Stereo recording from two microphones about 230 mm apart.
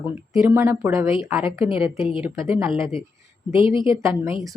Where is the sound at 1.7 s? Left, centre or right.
Left.